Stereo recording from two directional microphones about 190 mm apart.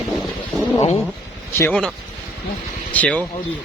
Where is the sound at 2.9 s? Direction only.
5° left (ahead or behind).